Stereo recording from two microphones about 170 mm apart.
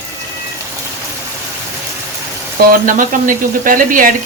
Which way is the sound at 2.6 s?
55° right (ahead or behind).